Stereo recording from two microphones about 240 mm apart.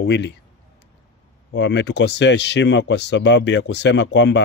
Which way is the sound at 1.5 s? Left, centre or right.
Left.